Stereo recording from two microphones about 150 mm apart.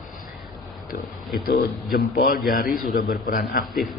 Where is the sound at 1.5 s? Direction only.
85° left.